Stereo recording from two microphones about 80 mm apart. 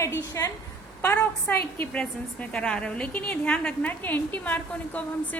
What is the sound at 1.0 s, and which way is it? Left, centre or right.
Speech, left.